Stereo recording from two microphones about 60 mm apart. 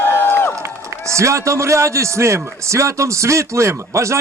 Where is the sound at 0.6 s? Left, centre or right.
Right.